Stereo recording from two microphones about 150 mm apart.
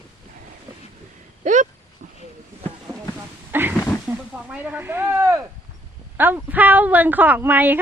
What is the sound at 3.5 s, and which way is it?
A woman's voice, 15° right (ahead or behind).